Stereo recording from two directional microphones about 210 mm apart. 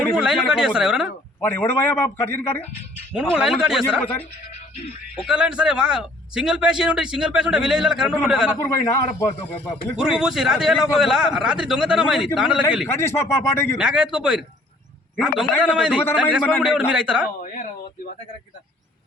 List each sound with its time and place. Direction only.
0.1 s a man's voice: 5° right (ahead or behind)
1.4 s a man's voice: 10° left (ahead or behind)
3.3 s a man's voice: centre (ahead or behind)
5.2 s a man's voice: 5° right (ahead or behind)
8.6 s a man's voice: 15° left (ahead or behind)
10.0 s a man's voice: 5° right (ahead or behind)
12.9 s a man's voice: 10° left (ahead or behind)
13.7 s a man's voice: 5° right (ahead or behind)
17.4 s speech: 40° left (ahead or behind)